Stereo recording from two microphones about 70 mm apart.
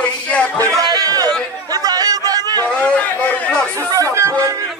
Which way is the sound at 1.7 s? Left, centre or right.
Right.